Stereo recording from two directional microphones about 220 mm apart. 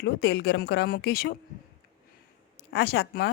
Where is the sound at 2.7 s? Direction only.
50° left (ahead or behind).